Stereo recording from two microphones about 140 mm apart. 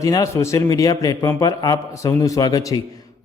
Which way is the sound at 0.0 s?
25° left (ahead or behind).